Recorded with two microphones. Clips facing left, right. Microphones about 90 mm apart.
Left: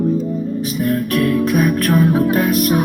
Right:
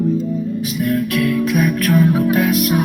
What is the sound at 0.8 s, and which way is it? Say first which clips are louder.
Music: left 1 dB; 40° left (ahead or behind).